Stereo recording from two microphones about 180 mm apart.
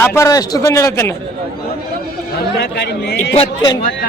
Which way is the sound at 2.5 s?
70° left (ahead or behind).